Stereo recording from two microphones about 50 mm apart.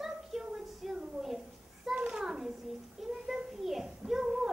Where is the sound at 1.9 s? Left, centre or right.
Centre.